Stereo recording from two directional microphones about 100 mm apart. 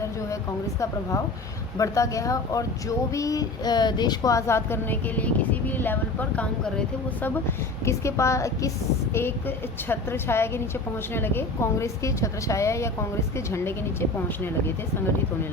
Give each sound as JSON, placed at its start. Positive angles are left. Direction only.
{"t": 1.8, "sound": "a woman's voice", "side_deg": 35}
{"t": 7.9, "sound": "a woman's voice", "side_deg": 30}